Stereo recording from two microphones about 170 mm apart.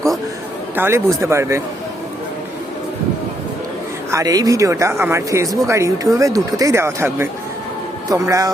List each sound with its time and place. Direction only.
0.8 s speech: 15° right (ahead or behind)
4.1 s speech: 20° right (ahead or behind)